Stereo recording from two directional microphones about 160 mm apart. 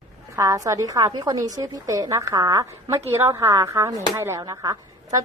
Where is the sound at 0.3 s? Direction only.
20° right (ahead or behind).